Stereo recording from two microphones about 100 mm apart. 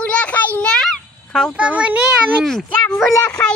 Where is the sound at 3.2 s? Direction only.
10° left (ahead or behind).